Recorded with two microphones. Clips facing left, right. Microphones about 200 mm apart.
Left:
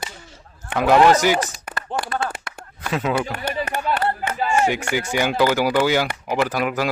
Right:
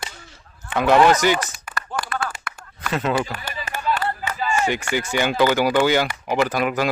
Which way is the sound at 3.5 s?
60° left (ahead or behind).